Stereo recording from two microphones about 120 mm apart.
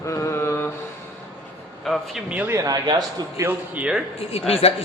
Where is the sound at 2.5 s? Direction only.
30° right (ahead or behind).